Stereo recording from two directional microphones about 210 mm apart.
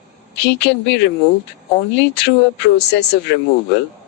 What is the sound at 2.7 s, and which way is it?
Speech, 50° left (ahead or behind).